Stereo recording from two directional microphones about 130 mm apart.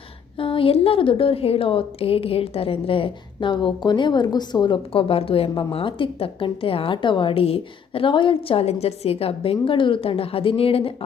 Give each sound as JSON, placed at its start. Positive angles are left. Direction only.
{"t": 0.3, "sound": "a woman's voice", "side_deg": 45}